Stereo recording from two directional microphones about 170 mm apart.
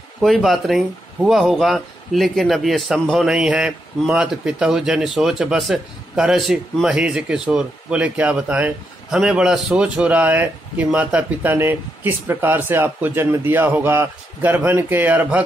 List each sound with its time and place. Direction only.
0.2 s speech: centre (ahead or behind)